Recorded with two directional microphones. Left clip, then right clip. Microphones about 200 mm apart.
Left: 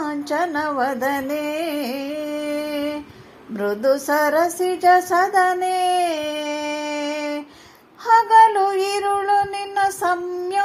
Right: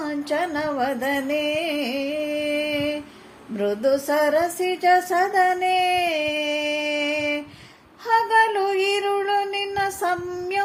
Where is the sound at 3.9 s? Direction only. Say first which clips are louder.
Left 2 dB; 10° right (ahead or behind).